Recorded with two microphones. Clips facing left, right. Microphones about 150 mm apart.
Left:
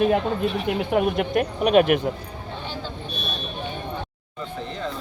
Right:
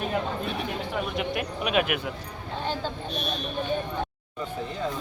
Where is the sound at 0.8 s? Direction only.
60° left (ahead or behind); by 2.1 s 40° left (ahead or behind).